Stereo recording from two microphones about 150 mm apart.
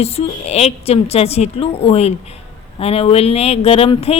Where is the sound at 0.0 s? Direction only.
45° left (ahead or behind).